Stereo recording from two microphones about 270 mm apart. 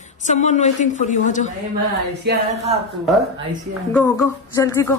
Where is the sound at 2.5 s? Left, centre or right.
Right.